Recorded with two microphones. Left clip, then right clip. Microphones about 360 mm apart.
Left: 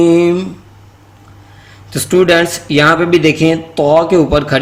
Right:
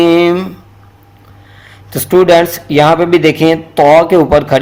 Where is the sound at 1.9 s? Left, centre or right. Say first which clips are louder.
Right 3 dB; centre.